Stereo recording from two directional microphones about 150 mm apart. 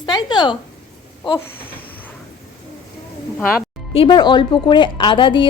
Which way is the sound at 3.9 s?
35° left (ahead or behind).